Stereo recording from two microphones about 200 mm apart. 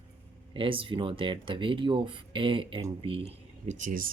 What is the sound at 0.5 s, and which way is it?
Speech, 25° right (ahead or behind).